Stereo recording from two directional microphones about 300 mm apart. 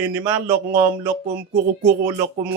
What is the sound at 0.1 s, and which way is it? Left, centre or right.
A man's voice, centre.